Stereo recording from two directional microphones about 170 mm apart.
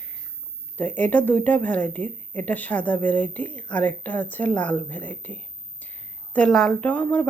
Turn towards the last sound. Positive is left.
turn(degrees=10)  # may be behind; listen again after turning